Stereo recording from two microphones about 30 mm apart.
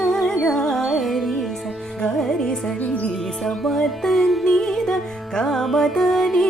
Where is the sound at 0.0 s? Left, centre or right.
Centre.